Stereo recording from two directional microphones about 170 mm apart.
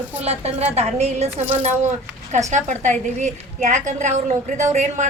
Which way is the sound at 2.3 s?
45° right (ahead or behind).